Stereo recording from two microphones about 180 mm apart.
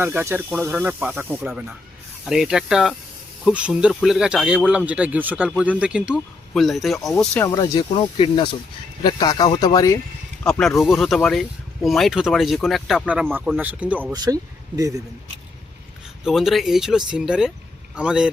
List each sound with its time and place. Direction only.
0.0 s speech: 10° right (ahead or behind)
7.4 s speech: 20° left (ahead or behind)
10.6 s speech: centre (ahead or behind)
14.1 s speech: 20° right (ahead or behind)
16.2 s speech: centre (ahead or behind)